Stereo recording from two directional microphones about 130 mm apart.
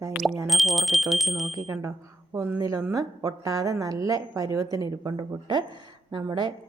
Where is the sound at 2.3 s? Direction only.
25° right (ahead or behind).